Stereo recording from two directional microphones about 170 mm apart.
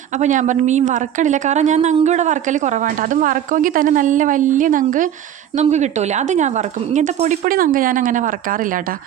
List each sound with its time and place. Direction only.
0.2 s speech: 45° right (ahead or behind)